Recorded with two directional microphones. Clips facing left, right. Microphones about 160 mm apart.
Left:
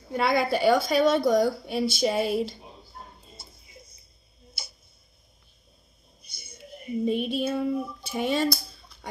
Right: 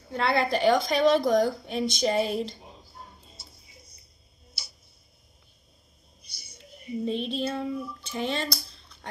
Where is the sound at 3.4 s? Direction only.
50° left (ahead or behind).